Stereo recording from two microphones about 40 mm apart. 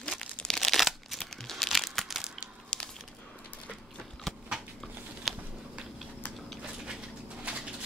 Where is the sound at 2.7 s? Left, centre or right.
Left.